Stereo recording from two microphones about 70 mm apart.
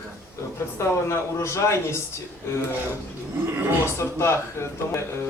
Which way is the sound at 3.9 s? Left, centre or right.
Left.